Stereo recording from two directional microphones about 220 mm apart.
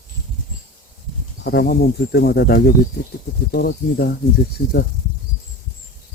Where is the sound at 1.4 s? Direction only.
45° left (ahead or behind).